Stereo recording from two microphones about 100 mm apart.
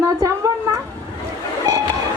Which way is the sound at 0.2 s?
35° right (ahead or behind).